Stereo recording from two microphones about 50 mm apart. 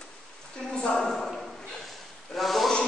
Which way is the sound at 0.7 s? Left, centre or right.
Centre.